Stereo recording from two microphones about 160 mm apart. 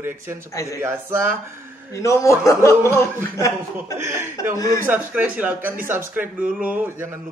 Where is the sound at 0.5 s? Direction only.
20° left (ahead or behind).